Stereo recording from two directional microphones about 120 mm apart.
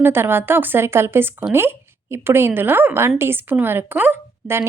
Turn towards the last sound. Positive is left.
turn(degrees=-20)  # may be behind; listen again after turning